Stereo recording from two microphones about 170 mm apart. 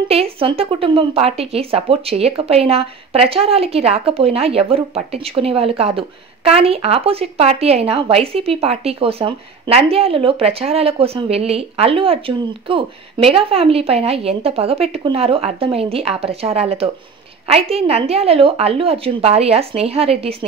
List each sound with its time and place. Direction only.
0.1 s speech: 35° right (ahead or behind)